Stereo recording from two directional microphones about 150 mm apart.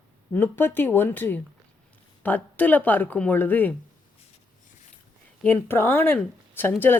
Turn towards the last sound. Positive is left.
turn(degrees=15)  # may be behind; listen again after turning